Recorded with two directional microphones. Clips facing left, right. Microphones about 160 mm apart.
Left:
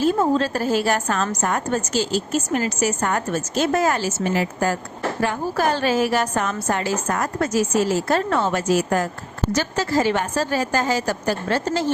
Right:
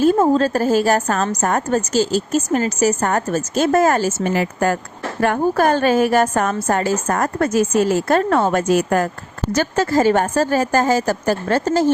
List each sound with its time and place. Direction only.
0.0 s a woman's voice: 45° right (ahead or behind)